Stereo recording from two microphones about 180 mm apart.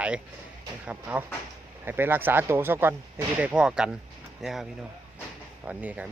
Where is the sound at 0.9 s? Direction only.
10° right (ahead or behind).